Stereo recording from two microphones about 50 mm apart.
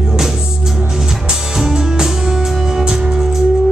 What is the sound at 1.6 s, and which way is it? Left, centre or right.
Music, centre.